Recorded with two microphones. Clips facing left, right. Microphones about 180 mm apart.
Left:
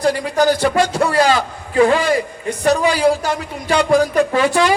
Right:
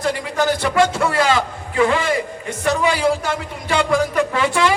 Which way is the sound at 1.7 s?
30° left (ahead or behind).